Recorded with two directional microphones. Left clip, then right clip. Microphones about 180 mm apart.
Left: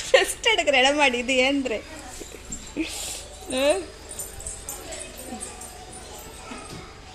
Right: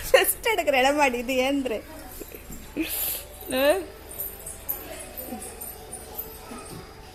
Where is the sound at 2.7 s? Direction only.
Centre (ahead or behind).